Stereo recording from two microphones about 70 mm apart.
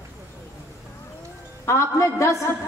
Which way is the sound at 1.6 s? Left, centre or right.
Left.